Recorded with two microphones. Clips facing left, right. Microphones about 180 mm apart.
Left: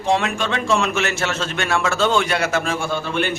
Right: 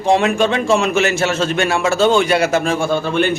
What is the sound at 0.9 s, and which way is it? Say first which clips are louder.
Speech: right 6 dB; 5° right (ahead or behind).